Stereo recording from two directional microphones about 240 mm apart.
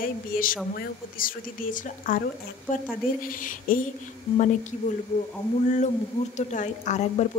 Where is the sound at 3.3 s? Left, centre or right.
Left.